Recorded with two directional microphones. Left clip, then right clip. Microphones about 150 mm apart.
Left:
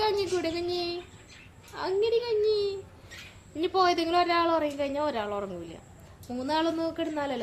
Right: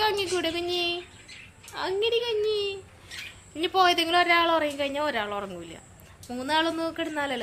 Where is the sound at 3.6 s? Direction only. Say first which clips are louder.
Right 3 dB; 5° right (ahead or behind).